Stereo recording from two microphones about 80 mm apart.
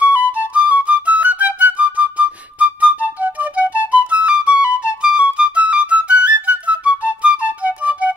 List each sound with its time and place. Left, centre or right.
0.0 s flute: centre